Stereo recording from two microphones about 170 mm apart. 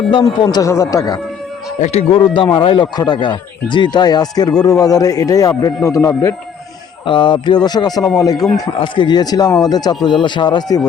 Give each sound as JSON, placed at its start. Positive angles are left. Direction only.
{"t": 0.4, "sound": "a man's voice", "side_deg": 20}
{"t": 1.8, "sound": "a man's voice", "side_deg": 40}
{"t": 8.4, "sound": "speech", "side_deg": 0}
{"t": 8.6, "sound": "a man's voice", "side_deg": 25}